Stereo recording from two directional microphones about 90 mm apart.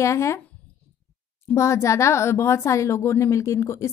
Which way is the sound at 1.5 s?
30° left (ahead or behind).